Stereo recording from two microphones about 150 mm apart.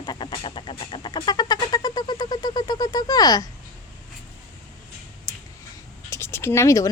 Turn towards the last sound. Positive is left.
turn(degrees=20)  # may be behind; listen again after turning